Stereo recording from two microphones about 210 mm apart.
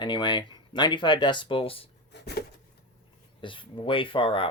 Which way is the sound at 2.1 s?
50° left (ahead or behind).